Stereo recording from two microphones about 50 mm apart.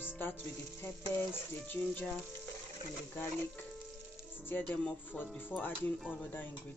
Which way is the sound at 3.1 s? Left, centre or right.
Left.